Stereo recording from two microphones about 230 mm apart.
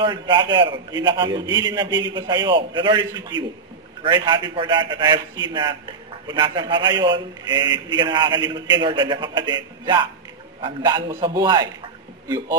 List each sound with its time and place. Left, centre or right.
0.0 s a man's voice: centre